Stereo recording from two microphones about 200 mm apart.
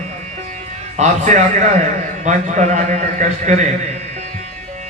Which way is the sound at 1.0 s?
35° right (ahead or behind).